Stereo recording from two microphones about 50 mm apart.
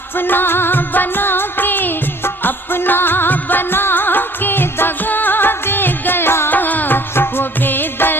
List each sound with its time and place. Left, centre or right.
0.2 s music: left
6.5 s music: left